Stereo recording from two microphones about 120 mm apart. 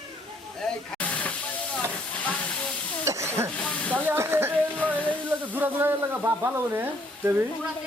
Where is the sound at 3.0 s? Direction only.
25° right (ahead or behind).